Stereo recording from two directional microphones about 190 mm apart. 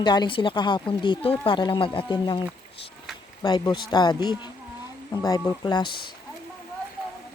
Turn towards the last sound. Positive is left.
turn(degrees=25)  # may be behind; listen again after turning